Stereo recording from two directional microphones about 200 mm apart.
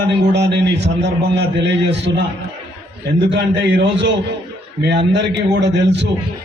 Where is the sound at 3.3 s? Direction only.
60° right (ahead or behind).